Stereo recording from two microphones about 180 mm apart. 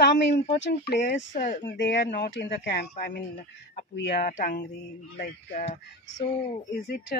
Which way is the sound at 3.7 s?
70° left (ahead or behind).